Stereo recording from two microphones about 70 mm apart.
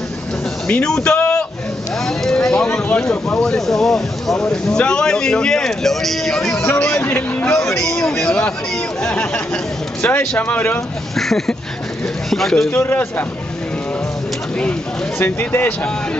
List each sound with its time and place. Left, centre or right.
0.7 s speech: centre
6.5 s a man's voice: left
7.5 s a man's voice: left
8.0 s speech: centre; by 10.8 s left
11.1 s speech: centre
12.7 s a man's voice: left
15.2 s speech: left